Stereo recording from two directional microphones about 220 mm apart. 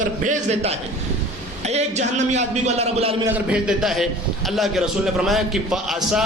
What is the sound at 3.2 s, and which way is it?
A man's voice, 5° right (ahead or behind).